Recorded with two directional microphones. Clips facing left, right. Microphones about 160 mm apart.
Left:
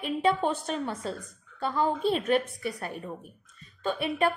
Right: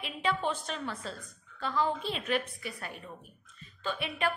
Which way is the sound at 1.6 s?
45° left (ahead or behind).